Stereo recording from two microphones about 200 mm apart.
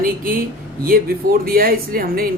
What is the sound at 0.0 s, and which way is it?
Speech, 45° right (ahead or behind).